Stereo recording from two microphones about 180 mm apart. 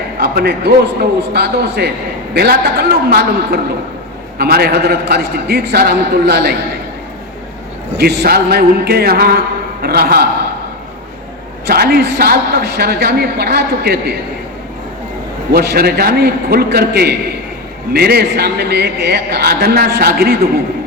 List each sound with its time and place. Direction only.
0.2 s a man's voice: 60° right (ahead or behind)
7.9 s a man's voice: 60° right (ahead or behind)
11.6 s a man's voice: 60° right (ahead or behind)
15.5 s a man's voice: 60° right (ahead or behind)